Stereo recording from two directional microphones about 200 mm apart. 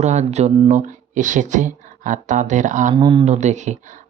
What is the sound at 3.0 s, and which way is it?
Speech, 25° right (ahead or behind).